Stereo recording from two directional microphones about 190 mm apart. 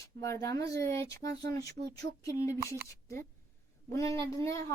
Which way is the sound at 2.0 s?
15° left (ahead or behind).